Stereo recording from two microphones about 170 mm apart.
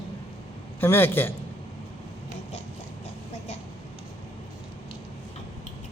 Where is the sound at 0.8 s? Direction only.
15° left (ahead or behind).